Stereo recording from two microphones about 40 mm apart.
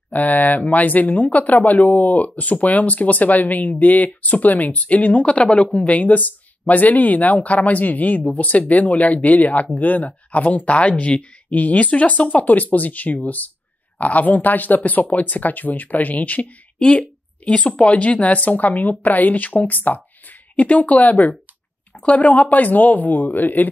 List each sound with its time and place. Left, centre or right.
0.1 s speech: left
17.5 s speech: left